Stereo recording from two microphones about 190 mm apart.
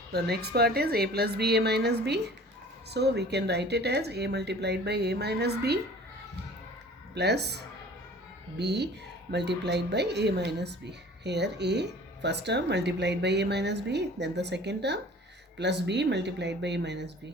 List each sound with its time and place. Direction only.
0.1 s a woman's voice: 60° right (ahead or behind)
7.1 s speech: 60° right (ahead or behind)
8.5 s a woman's voice: 65° right (ahead or behind)